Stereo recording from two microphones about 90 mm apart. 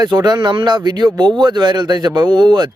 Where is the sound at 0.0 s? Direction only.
50° right (ahead or behind).